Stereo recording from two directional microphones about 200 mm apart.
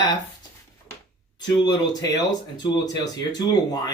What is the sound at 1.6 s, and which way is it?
Speech, 20° left (ahead or behind).